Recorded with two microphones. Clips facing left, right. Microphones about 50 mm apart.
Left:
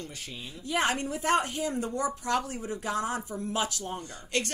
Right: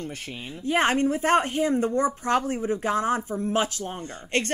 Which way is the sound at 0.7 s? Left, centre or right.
Right.